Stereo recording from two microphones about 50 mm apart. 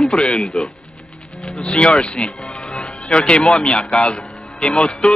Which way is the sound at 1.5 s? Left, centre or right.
Centre.